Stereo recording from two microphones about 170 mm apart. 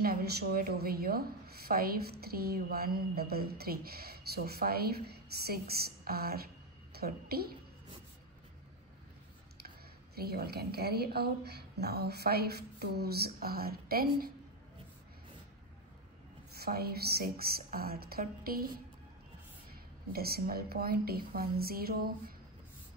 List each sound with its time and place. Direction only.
0.0 s a woman's voice: 60° right (ahead or behind)
10.1 s speech: 65° right (ahead or behind)
16.5 s a woman's voice: 65° right (ahead or behind)
19.7 s a woman's voice: 65° right (ahead or behind)